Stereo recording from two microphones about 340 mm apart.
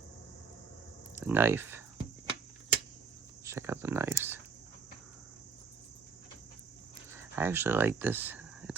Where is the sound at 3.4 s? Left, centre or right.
Centre.